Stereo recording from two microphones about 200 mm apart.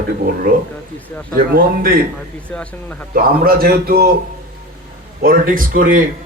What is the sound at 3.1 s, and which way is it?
Speech, 50° right (ahead or behind).